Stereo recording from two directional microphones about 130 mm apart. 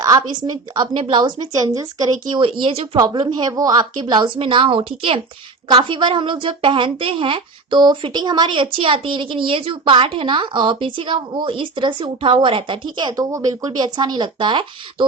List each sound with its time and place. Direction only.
0.0 s a woman's voice: 30° right (ahead or behind)
2.4 s a woman's voice: 40° right (ahead or behind)